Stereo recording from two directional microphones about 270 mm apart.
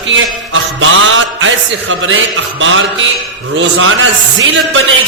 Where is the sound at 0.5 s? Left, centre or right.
Right.